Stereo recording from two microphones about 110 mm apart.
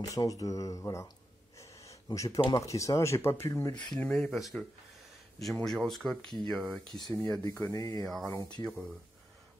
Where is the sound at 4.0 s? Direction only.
10° left (ahead or behind).